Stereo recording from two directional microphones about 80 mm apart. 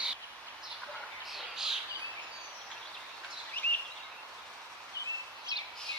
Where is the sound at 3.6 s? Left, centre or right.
Left.